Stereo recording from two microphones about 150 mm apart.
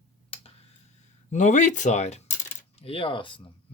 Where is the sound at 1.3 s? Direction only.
50° left (ahead or behind).